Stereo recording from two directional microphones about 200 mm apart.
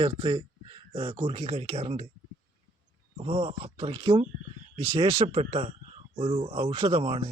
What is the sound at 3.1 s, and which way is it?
Speech, 30° right (ahead or behind).